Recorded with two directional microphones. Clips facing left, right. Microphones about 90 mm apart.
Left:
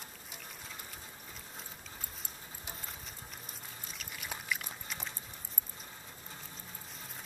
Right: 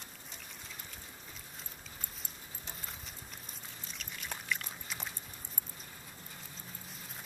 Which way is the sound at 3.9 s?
5° left (ahead or behind).